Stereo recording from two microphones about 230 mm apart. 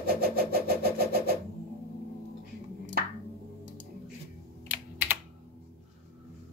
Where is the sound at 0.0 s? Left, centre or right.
Right.